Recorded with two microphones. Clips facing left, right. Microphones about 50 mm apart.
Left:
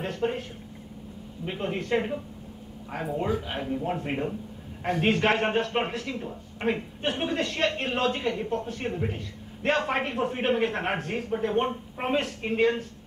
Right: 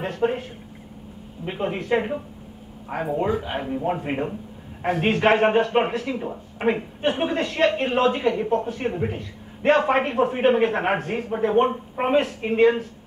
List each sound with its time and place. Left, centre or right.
0.0 s a man's voice: centre
2.9 s a man's voice: centre